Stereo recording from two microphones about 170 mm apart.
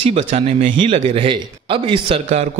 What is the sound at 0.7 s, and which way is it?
A man's voice, 30° right (ahead or behind).